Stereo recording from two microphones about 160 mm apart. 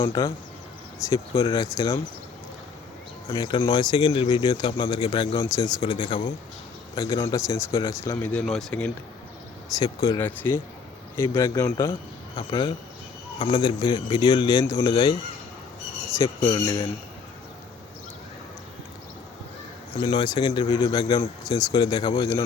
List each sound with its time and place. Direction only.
0.0 s speech: 25° left (ahead or behind)
3.2 s speech: 25° left (ahead or behind)
6.9 s speech: 25° left (ahead or behind)
8.2 s speech: 10° left (ahead or behind)
9.7 s speech: 20° left (ahead or behind)
12.4 s a man's voice: 30° left (ahead or behind)
16.1 s speech: 20° left (ahead or behind)
20.0 s speech: 30° left (ahead or behind)